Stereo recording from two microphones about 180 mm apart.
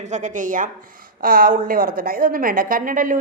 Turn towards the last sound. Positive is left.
turn(degrees=-50)  # may be behind; listen again after turning